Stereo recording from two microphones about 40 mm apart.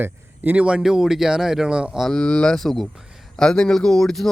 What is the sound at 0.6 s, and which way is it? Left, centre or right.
Speech, right.